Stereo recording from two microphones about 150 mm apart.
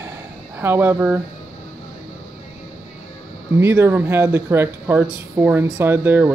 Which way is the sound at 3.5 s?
15° right (ahead or behind).